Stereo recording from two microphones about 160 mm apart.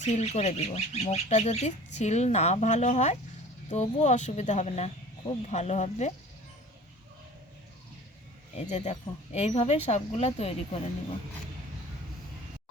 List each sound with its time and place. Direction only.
0.0 s speech: 45° left (ahead or behind)
8.5 s speech: 45° left (ahead or behind)